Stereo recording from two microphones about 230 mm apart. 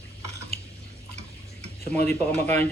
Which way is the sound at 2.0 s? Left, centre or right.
Centre.